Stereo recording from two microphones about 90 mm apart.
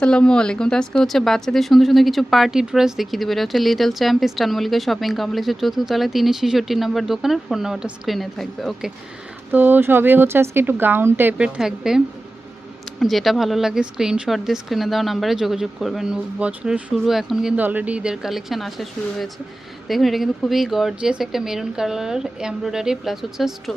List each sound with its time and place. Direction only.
0.0 s speech: 10° left (ahead or behind)
9.5 s speech: 20° right (ahead or behind); by 16.1 s centre (ahead or behind)
16.4 s speech: 15° right (ahead or behind)
16.9 s speech: centre (ahead or behind)
17.6 s speech: 20° right (ahead or behind); by 23.7 s centre (ahead or behind)